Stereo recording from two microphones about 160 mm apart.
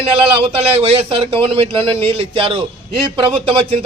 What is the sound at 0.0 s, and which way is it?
A man's voice, 35° right (ahead or behind).